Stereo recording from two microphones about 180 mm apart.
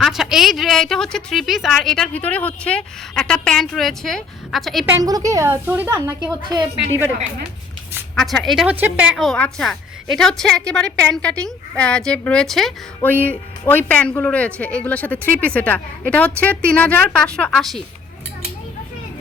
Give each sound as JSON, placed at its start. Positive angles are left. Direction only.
{"t": 0.0, "sound": "a woman's voice", "side_deg": 0}
{"t": 5.0, "sound": "a woman's voice", "side_deg": -20}
{"t": 8.1, "sound": "a woman's voice", "side_deg": 0}